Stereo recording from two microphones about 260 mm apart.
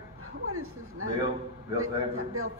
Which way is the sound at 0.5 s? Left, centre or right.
Right.